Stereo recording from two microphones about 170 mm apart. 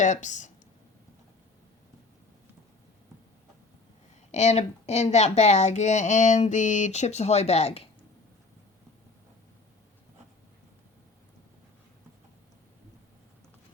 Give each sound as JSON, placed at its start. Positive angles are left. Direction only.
{"t": 0.0, "sound": "speech", "side_deg": 45}
{"t": 4.3, "sound": "speech", "side_deg": 40}